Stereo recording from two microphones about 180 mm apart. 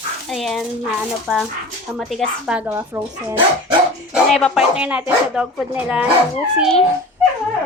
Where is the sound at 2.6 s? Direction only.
15° right (ahead or behind).